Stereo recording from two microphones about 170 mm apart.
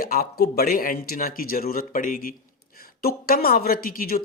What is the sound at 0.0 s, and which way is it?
Speech, 60° left (ahead or behind).